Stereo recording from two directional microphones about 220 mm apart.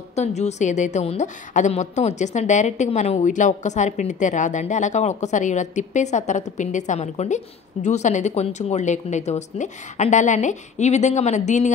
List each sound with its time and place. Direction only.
0.1 s a woman's voice: 30° left (ahead or behind)